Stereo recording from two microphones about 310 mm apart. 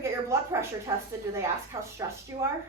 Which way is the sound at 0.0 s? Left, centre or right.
Centre.